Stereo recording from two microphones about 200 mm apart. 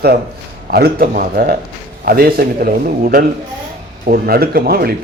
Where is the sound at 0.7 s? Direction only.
50° right (ahead or behind).